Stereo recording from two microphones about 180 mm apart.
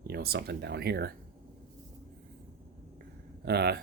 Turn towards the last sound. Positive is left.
turn(degrees=-65)  # may be behind; listen again after turning